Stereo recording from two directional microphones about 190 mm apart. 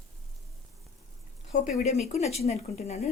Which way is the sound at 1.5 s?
40° left (ahead or behind).